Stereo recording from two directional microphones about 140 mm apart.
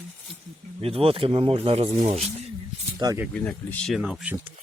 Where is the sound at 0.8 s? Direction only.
45° right (ahead or behind).